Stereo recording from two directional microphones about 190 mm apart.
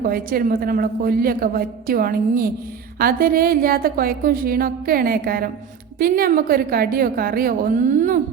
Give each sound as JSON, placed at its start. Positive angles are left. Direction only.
{"t": 0.0, "sound": "a woman's voice", "side_deg": -50}